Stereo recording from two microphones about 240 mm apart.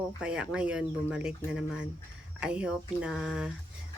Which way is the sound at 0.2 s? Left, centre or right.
Centre.